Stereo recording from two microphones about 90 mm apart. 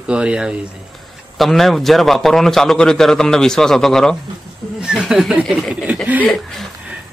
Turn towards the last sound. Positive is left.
turn(degrees=0)  # may be behind; listen again after turning